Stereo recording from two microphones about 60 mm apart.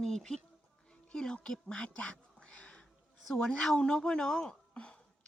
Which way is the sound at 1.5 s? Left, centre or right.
Centre.